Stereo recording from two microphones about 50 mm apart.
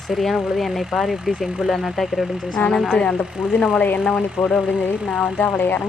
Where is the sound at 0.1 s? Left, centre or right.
Centre.